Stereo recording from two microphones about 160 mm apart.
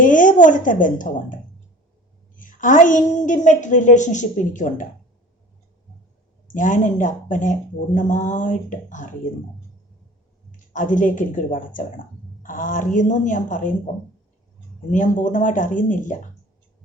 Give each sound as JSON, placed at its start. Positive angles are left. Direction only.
{"t": 0.0, "sound": "a woman's voice", "side_deg": 55}
{"t": 6.5, "sound": "a woman's voice", "side_deg": 55}
{"t": 10.7, "sound": "a woman's voice", "side_deg": 55}
{"t": 14.8, "sound": "a woman's voice", "side_deg": 55}